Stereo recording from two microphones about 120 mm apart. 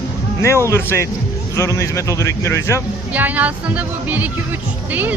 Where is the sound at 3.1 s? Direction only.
15° right (ahead or behind).